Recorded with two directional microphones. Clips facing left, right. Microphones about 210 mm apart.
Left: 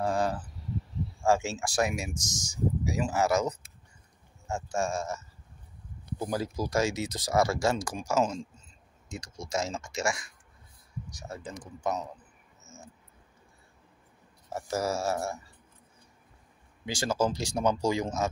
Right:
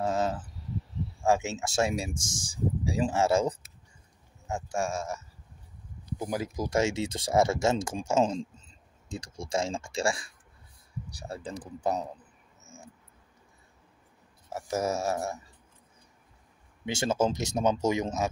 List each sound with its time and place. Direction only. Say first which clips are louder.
0.0 s a sound: even; 20° right (ahead or behind)
1.2 s speech: even; 20° right (ahead or behind)
4.5 s speech: even; 15° right (ahead or behind); by 12.1 s 35° right (ahead or behind)
12.6 s cricket: even; 15° right (ahead or behind)
14.7 s speech: right 1 dB; 20° right (ahead or behind)
16.8 s speech: right 2 dB; 25° right (ahead or behind)